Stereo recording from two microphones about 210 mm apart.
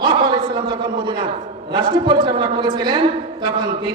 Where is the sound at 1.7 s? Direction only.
20° right (ahead or behind).